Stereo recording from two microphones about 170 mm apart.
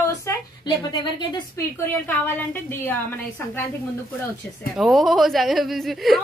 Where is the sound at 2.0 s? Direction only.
15° left (ahead or behind).